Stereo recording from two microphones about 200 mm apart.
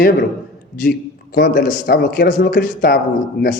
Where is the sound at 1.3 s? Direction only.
45° left (ahead or behind).